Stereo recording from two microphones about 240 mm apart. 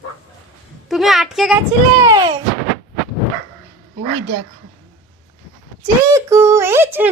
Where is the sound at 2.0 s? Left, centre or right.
Centre.